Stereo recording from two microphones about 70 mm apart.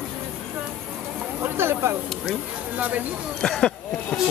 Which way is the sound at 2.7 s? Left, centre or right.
Right.